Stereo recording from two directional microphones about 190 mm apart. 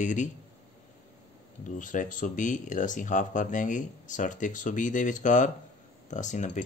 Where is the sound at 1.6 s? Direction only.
40° left (ahead or behind).